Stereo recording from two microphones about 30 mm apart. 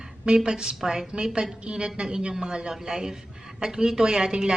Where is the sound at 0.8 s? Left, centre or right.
Centre.